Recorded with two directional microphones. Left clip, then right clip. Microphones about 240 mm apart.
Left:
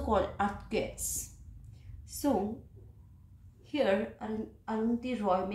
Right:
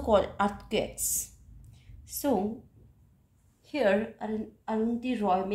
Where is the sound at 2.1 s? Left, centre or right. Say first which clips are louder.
Right 2 dB; right.